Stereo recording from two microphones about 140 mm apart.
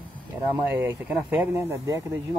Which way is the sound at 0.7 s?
15° right (ahead or behind).